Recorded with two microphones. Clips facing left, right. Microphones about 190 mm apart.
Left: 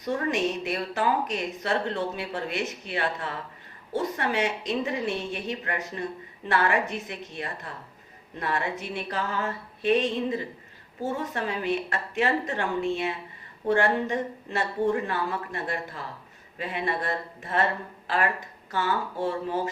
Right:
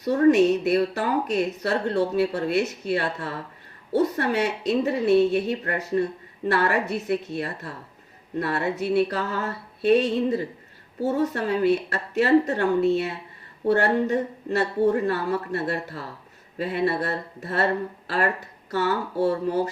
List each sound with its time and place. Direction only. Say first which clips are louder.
0.0 s speech: right 9 dB; 40° right (ahead or behind)
18.7 s speech: right 4 dB; 40° right (ahead or behind)